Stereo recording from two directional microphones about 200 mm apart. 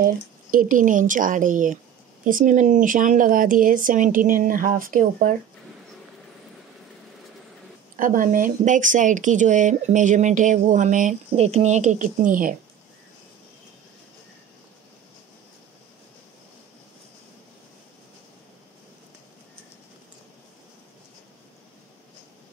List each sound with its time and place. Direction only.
0.0 s a woman's voice: 45° right (ahead or behind)
7.9 s speech: 45° right (ahead or behind)